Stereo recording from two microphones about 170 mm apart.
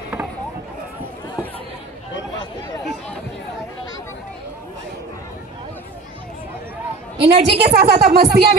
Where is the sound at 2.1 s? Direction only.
25° left (ahead or behind).